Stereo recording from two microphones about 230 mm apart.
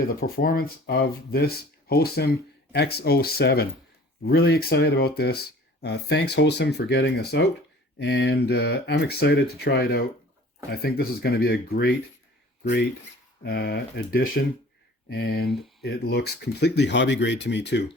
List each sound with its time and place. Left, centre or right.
0.2 s speech: left
13.4 s speech: left
15.4 s speech: centre
15.8 s speech: left